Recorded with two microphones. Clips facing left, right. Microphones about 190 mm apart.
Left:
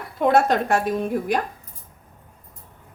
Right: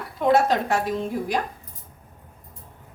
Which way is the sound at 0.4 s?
55° left (ahead or behind).